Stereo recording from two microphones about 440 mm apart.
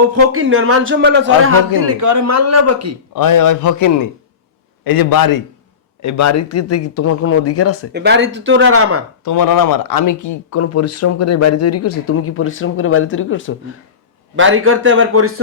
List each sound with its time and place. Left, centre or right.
0.1 s a man's voice: right
3.2 s a man's voice: left
4.8 s a man's voice: left
6.0 s speech: left
7.9 s speech: right
9.2 s speech: left
14.3 s speech: right